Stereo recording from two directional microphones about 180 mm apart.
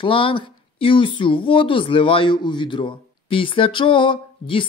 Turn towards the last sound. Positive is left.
turn(degrees=30)  # may be behind; listen again after turning